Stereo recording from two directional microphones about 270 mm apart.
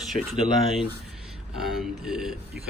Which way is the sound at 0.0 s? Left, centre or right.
Centre.